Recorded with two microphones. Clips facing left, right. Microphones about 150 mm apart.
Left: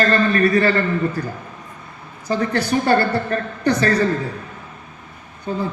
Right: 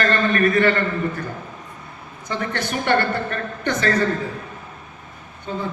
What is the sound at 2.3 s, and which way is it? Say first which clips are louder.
A man's voice: left 6 dB; 35° left (ahead or behind).